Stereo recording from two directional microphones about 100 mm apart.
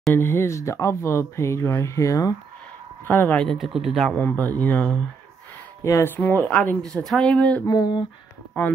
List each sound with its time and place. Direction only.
0.1 s speech: 20° left (ahead or behind)
3.1 s speech: 20° left (ahead or behind)
3.4 s speech: centre (ahead or behind)
4.2 s speech: 15° left (ahead or behind)
5.9 s speech: 25° left (ahead or behind)
7.6 s speech: 40° left (ahead or behind)
8.6 s speech: 20° left (ahead or behind)